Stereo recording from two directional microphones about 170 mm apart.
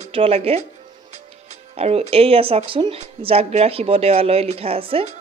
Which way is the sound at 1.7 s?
35° right (ahead or behind).